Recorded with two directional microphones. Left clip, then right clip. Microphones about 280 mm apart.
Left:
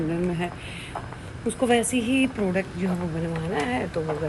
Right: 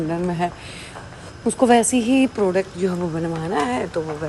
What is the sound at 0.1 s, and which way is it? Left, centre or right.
Speech, centre.